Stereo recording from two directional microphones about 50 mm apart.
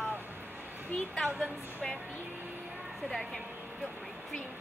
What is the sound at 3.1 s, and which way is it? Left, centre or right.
Speech, centre.